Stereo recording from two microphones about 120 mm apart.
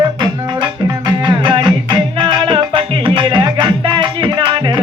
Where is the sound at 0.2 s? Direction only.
40° right (ahead or behind).